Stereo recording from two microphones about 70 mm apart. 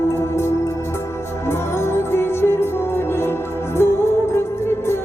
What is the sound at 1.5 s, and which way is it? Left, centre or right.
Music, left.